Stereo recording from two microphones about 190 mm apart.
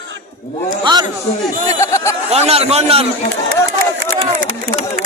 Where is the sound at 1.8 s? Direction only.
15° left (ahead or behind).